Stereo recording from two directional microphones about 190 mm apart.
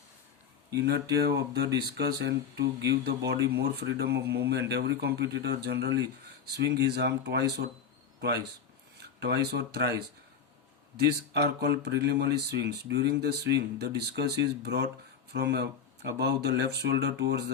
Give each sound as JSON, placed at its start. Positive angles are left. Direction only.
{"t": 0.7, "sound": "speech", "side_deg": -60}
{"t": 9.2, "sound": "speech", "side_deg": -60}
{"t": 10.9, "sound": "speech", "side_deg": -60}